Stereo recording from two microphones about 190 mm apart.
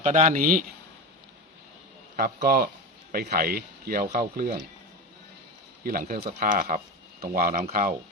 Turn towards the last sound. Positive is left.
turn(degrees=-45)  # may be behind; listen again after turning